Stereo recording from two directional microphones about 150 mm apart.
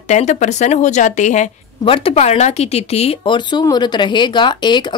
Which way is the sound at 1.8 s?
40° left (ahead or behind).